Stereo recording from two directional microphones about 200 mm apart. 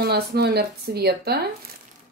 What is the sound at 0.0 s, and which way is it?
Speech, 55° right (ahead or behind).